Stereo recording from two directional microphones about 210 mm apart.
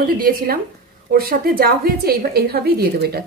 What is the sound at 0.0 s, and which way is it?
A woman's voice, 45° right (ahead or behind).